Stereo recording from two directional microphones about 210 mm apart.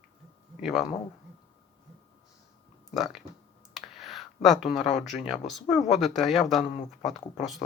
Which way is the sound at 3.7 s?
Centre (ahead or behind).